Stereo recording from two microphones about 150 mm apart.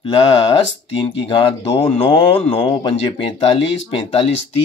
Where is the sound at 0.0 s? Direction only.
40° left (ahead or behind).